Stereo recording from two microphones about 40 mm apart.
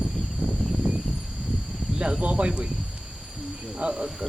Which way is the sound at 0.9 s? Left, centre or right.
Right.